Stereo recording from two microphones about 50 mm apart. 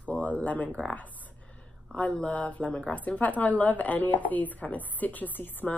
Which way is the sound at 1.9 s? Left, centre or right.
Left.